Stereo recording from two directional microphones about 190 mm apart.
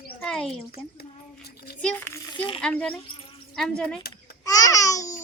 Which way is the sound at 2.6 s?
5° left (ahead or behind).